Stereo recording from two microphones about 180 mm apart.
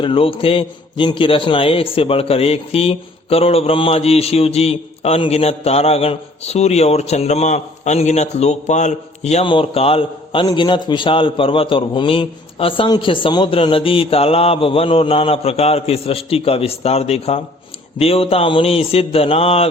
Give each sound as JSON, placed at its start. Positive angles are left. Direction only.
{"t": 0.0, "sound": "a man's voice", "side_deg": 30}